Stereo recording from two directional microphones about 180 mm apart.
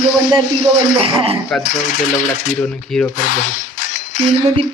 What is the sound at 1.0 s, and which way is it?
Speech, 30° right (ahead or behind).